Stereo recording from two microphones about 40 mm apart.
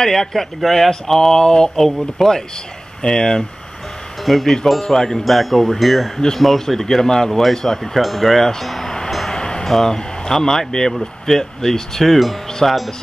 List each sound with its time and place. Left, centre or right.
0.0 s speech: centre
4.2 s speech: centre
9.3 s vehicle: left
9.7 s speech: centre
12.4 s wind chime: centre